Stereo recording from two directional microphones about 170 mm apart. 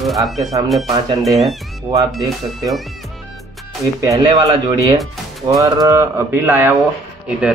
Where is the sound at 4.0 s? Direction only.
25° right (ahead or behind).